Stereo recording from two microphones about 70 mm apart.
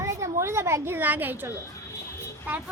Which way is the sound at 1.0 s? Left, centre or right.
Right.